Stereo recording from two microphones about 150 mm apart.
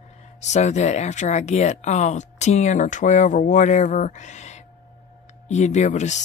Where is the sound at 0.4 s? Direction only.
50° left (ahead or behind).